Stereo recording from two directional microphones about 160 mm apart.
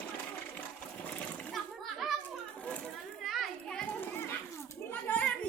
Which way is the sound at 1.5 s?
Centre (ahead or behind).